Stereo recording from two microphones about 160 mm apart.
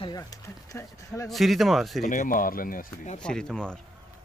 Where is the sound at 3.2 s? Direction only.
5° left (ahead or behind).